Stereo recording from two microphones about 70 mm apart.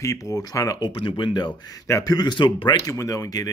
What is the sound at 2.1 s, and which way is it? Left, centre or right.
Speech, left.